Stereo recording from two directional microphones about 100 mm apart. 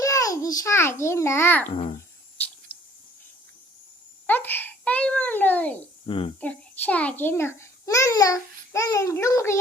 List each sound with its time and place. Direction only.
0.0 s babbling: 35° left (ahead or behind)
4.3 s babbling: 20° left (ahead or behind)
6.1 s speech: 60° left (ahead or behind)
6.4 s a child's voice: 15° left (ahead or behind); by 9.6 s 30° left (ahead or behind)